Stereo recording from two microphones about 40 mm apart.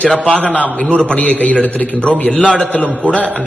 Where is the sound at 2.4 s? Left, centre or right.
Left.